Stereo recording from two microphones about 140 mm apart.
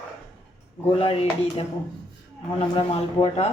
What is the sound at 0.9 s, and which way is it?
A woman's voice, 40° left (ahead or behind).